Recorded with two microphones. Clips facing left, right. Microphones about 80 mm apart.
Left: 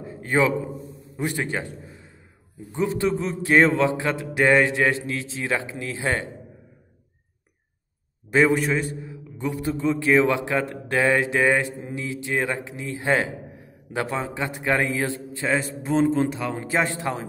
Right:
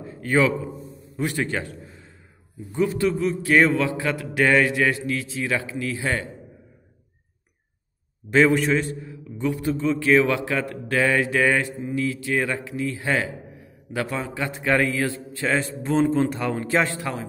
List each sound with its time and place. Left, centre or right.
0.0 s a sound: left
1.1 s a man's voice: left
8.3 s a man's voice: left
15.9 s speech: centre
16.6 s a man's voice: left